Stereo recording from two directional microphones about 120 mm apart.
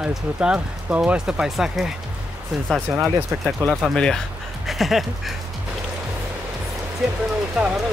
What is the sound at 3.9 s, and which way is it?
Speech, 5° left (ahead or behind).